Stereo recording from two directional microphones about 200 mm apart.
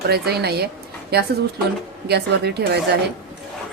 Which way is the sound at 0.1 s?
55° right (ahead or behind).